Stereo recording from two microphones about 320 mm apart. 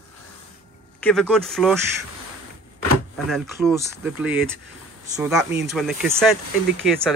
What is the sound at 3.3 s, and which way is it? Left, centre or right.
Speech, centre.